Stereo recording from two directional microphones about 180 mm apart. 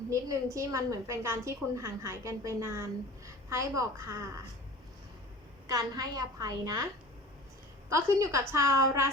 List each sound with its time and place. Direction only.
0.5 s a woman's voice: 15° right (ahead or behind)
5.6 s a woman's voice: 20° right (ahead or behind)
7.9 s a woman's voice: 15° right (ahead or behind)